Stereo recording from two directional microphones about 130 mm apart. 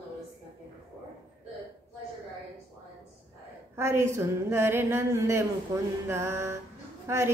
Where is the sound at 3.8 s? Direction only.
20° right (ahead or behind).